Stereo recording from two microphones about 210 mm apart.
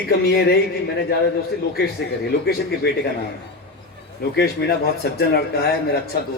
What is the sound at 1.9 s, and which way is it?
Speech, 50° left (ahead or behind).